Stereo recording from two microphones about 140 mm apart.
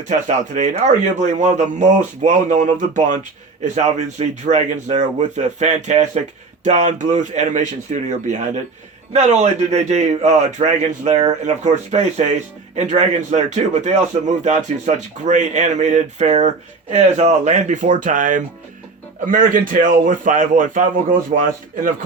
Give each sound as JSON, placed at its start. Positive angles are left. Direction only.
{"t": 0.1, "sound": "a man's voice", "side_deg": -60}
{"t": 19.2, "sound": "a man's voice", "side_deg": -75}